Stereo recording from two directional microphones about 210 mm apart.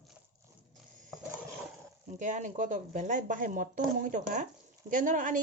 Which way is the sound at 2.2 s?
35° right (ahead or behind).